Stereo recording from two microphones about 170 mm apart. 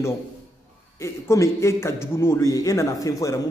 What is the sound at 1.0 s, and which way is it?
A man's voice, 15° left (ahead or behind).